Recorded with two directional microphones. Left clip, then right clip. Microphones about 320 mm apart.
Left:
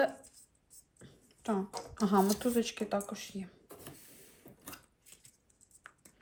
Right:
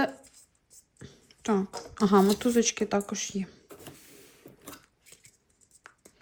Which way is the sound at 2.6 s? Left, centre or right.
Right.